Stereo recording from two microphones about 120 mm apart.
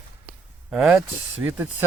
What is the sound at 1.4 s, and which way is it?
Speech, 15° right (ahead or behind).